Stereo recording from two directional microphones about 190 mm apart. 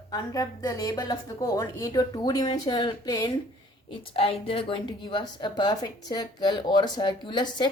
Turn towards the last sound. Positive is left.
turn(degrees=25)  # may be behind; listen again after turning